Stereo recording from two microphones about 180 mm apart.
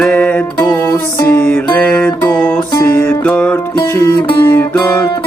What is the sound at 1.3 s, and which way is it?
Music, 5° left (ahead or behind).